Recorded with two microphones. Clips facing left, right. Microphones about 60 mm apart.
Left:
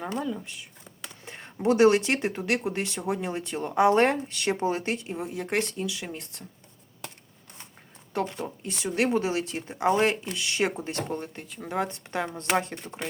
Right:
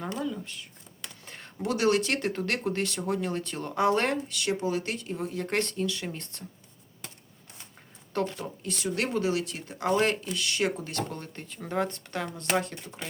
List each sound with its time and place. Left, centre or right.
0.3 s speech: centre
8.1 s speech: centre
11.3 s speech: centre
11.9 s speech: left